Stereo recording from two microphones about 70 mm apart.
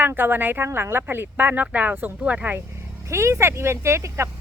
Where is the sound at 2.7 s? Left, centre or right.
Right.